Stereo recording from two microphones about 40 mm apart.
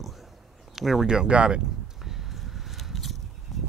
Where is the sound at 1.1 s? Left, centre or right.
Right.